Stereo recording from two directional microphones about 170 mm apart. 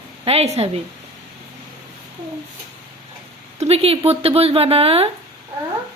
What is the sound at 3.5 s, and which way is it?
Speech, 35° right (ahead or behind).